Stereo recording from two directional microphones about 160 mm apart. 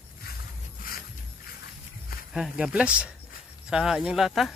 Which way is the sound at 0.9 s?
65° left (ahead or behind).